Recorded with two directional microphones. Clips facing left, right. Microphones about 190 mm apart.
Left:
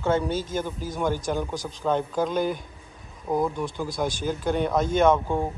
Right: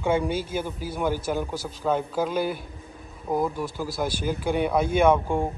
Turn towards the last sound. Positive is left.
turn(degrees=-10)  # may be behind; listen again after turning